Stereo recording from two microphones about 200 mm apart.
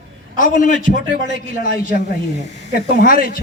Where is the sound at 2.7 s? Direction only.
45° left (ahead or behind).